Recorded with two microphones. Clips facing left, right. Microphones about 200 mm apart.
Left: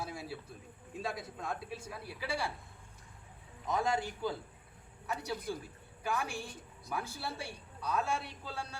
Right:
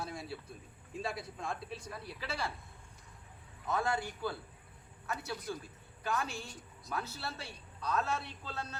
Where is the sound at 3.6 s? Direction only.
15° left (ahead or behind).